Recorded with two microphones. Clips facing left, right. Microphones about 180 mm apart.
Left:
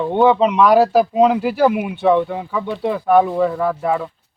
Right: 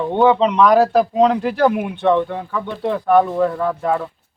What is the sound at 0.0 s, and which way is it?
Speech, centre (ahead or behind).